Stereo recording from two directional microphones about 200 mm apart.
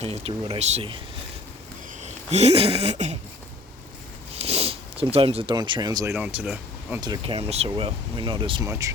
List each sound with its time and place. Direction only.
0.0 s speech: 30° right (ahead or behind)
2.0 s speech: 35° right (ahead or behind)
4.4 s speech: 30° right (ahead or behind)
6.1 s speech: 5° right (ahead or behind)
7.0 s speech: 25° right (ahead or behind)